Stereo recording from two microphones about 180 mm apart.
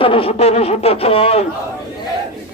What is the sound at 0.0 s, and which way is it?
Music, 30° left (ahead or behind).